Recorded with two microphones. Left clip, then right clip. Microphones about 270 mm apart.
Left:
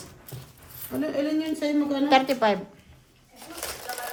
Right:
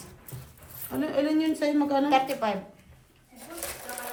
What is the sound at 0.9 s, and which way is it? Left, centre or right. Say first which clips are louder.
Speech: even; centre.